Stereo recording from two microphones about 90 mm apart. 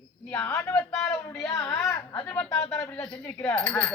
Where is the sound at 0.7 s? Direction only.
10° left (ahead or behind).